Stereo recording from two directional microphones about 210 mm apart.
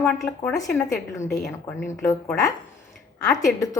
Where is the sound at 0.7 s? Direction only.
10° left (ahead or behind).